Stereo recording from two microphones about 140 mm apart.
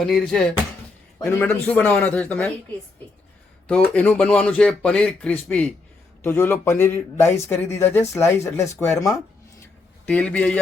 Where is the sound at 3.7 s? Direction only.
10° left (ahead or behind).